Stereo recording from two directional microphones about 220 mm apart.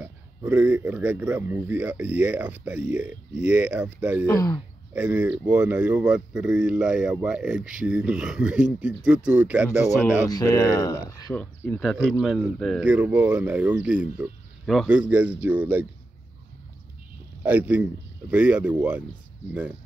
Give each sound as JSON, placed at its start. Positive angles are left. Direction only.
{"t": 0.0, "sound": "speech", "side_deg": -10}
{"t": 4.3, "sound": "speech", "side_deg": 15}
{"t": 4.9, "sound": "speech", "side_deg": -5}
{"t": 9.8, "sound": "speech", "side_deg": 10}
{"t": 17.4, "sound": "a man's voice", "side_deg": -5}